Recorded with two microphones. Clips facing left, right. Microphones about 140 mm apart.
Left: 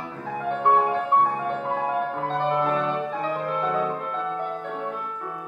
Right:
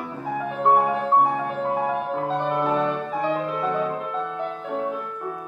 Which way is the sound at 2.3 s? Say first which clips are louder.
Even; 5° right (ahead or behind).